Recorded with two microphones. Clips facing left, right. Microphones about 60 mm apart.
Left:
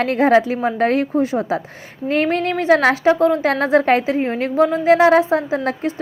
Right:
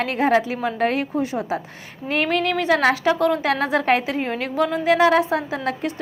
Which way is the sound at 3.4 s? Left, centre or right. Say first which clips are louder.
Left 5 dB; left.